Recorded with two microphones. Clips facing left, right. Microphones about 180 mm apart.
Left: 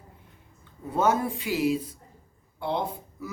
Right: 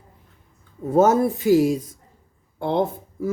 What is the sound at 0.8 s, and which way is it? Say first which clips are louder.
Speech: right 8 dB; 40° right (ahead or behind).